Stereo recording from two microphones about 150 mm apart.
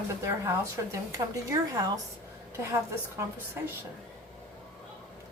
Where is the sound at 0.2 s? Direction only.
20° right (ahead or behind).